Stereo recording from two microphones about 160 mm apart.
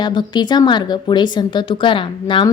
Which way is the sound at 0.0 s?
30° left (ahead or behind).